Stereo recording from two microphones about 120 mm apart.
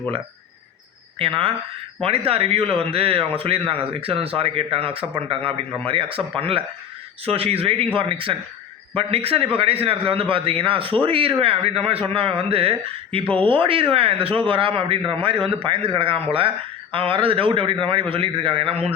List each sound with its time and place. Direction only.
1.2 s speech: 45° right (ahead or behind)